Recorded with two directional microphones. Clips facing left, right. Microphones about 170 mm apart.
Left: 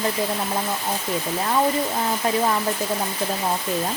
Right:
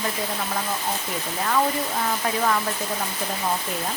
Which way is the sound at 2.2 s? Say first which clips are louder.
Left 6 dB; 25° left (ahead or behind).